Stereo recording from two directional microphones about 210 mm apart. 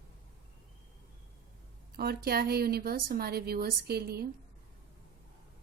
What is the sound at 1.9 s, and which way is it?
A woman's voice, 50° right (ahead or behind).